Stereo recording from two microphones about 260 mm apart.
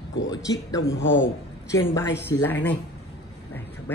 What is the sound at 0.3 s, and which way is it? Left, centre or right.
Speech, centre.